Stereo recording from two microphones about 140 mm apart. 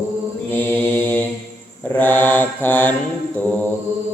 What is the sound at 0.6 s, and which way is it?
Mantra, 15° left (ahead or behind).